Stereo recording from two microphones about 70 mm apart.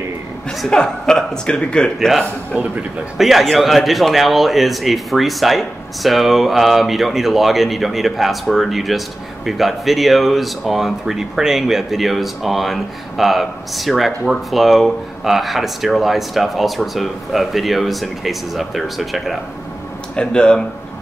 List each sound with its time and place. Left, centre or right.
0.7 s a man's voice: centre
2.0 s a man's voice: centre
2.5 s a man's voice: right
3.2 s a man's voice: centre
20.2 s a man's voice: centre